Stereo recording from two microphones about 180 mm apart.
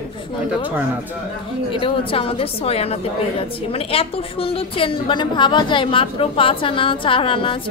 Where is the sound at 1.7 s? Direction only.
30° left (ahead or behind).